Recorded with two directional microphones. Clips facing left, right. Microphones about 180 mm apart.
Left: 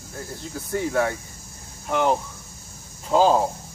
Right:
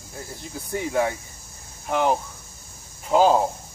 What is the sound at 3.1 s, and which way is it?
Speech, 15° right (ahead or behind).